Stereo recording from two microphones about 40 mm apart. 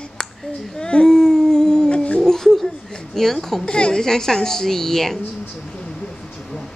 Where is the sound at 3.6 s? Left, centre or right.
Left.